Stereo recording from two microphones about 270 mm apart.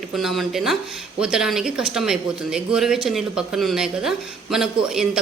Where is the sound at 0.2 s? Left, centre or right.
Centre.